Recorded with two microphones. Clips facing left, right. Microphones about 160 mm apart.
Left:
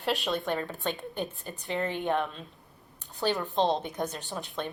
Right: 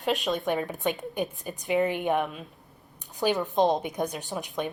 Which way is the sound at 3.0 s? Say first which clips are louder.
Right 3 dB; 15° right (ahead or behind).